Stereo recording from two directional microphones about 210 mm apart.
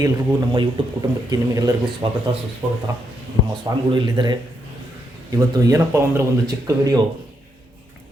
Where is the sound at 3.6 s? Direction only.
20° right (ahead or behind).